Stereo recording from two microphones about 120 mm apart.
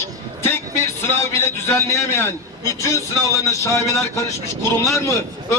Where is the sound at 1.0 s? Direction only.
20° left (ahead or behind).